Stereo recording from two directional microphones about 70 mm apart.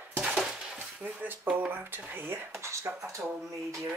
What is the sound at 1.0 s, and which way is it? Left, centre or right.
Speech, right.